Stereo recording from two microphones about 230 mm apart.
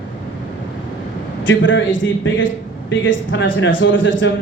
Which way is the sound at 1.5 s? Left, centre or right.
Left.